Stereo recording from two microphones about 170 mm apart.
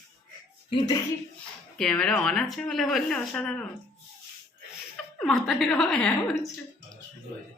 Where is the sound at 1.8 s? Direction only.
5° left (ahead or behind).